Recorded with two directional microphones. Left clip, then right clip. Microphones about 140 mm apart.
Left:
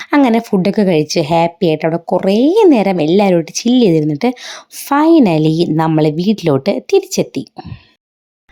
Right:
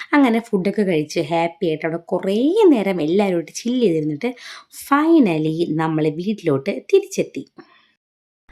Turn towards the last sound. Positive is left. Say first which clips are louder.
# left 4 dB
turn(degrees=45)  # may be behind; listen again after turning